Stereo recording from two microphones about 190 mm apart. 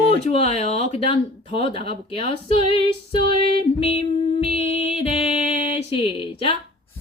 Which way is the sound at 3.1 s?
30° left (ahead or behind).